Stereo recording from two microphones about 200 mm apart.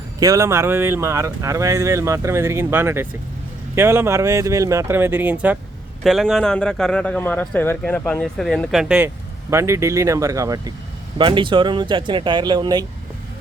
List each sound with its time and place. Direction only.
0.2 s speech: 15° right (ahead or behind)
9.0 s speech: 15° right (ahead or behind)